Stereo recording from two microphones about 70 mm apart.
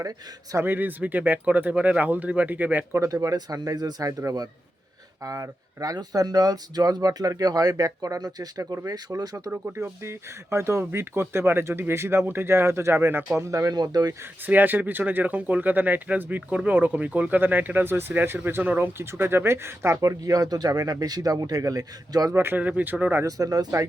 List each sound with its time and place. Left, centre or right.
0.0 s a man's voice: right
0.6 s speech: right
3.0 s speech: right
5.2 s speech: right
9.7 s speech: right
13.4 s speech: right
14.4 s speech: right
20.0 s speech: right
22.4 s speech: right
23.2 s speech: right